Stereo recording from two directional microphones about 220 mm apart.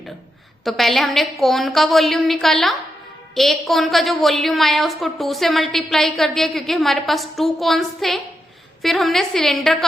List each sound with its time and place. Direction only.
0.6 s a woman's voice: centre (ahead or behind)